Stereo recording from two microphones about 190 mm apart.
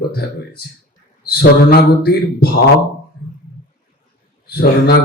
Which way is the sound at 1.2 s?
55° left (ahead or behind).